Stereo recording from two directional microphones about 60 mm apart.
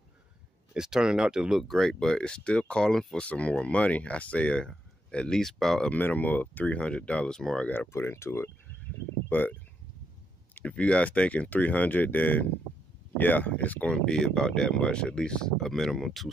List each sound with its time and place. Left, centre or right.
0.7 s speech: centre
1.6 s speech: centre
3.2 s speech: left; by 5.9 s centre
5.9 s speech: left; by 7.6 s centre
7.6 s speech: left
7.9 s speech: left
9.3 s speech: left
10.5 s speech: left; by 16.3 s centre